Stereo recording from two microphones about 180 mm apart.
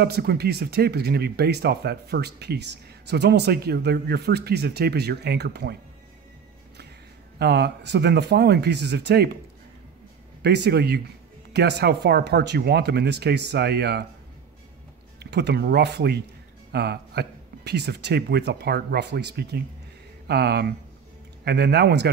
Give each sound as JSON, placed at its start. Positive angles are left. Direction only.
{"t": 0.0, "sound": "speech", "side_deg": -65}
{"t": 7.3, "sound": "speech", "side_deg": -65}
{"t": 10.4, "sound": "speech", "side_deg": -70}
{"t": 15.1, "sound": "speech", "side_deg": -65}